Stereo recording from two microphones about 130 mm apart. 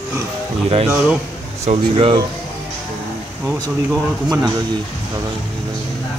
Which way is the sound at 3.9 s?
25° right (ahead or behind).